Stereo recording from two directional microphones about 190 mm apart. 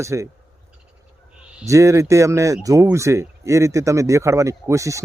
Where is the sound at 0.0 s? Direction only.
15° right (ahead or behind).